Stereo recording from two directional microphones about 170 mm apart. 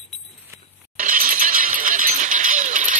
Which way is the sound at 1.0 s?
50° right (ahead or behind).